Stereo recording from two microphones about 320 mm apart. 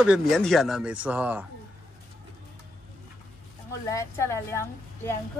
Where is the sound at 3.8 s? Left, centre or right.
Centre.